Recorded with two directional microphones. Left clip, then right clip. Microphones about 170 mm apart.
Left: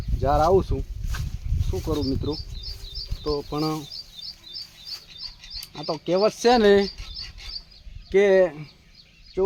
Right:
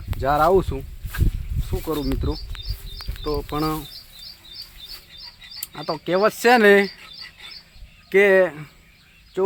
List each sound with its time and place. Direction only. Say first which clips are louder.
0.2 s speech: right 2 dB; 5° right (ahead or behind)
3.5 s speech: right 2 dB; 5° right (ahead or behind)
5.5 s speech: right 2 dB; 5° right (ahead or behind)
8.1 s speech: right 2 dB; centre (ahead or behind)